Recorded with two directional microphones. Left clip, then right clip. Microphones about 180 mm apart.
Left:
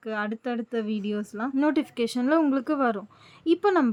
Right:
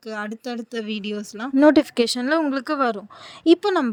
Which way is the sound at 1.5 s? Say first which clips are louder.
Right 11 dB; 35° right (ahead or behind).